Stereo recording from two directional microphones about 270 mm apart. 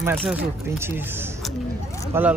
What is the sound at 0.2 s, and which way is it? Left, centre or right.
Speech, centre.